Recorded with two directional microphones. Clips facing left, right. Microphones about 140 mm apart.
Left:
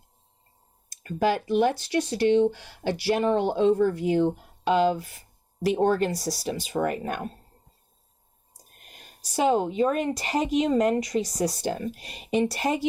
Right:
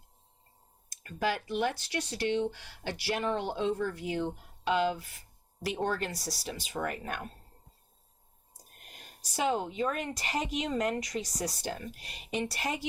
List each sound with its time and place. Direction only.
1.0 s speech: 30° left (ahead or behind)
9.3 s speech: 35° left (ahead or behind)